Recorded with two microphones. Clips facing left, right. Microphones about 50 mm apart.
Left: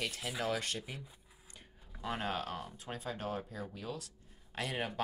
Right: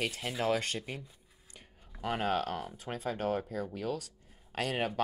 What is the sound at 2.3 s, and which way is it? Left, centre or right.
Speech, right.